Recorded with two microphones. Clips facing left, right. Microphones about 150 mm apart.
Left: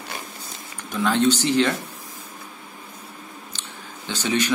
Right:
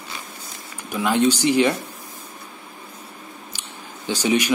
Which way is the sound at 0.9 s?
10° right (ahead or behind).